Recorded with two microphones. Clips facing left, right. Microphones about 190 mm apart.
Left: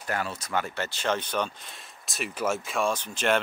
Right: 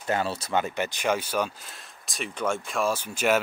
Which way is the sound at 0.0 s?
25° right (ahead or behind).